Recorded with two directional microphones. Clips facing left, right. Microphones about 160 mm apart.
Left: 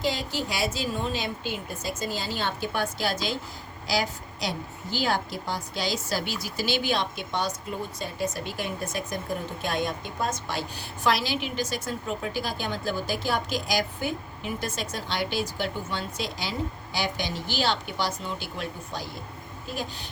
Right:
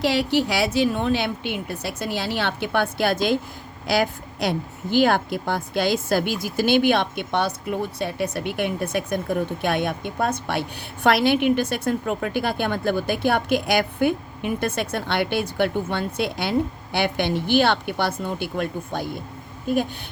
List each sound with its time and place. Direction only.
0.0 s a woman's voice: 70° right (ahead or behind)